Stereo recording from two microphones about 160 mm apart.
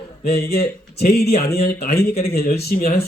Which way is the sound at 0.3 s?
80° left.